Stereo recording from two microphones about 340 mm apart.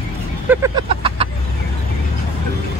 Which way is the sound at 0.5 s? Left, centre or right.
Centre.